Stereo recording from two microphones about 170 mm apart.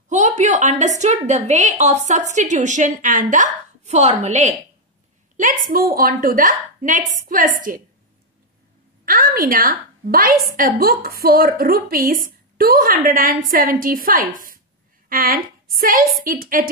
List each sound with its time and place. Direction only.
0.1 s a woman's voice: 45° right (ahead or behind)
5.7 s a woman's voice: 55° right (ahead or behind)
9.0 s a woman's voice: 55° right (ahead or behind)